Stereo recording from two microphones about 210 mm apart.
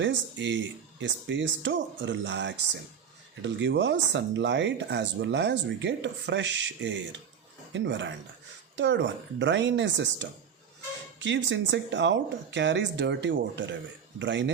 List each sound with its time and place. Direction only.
0.0 s speech: 60° right (ahead or behind)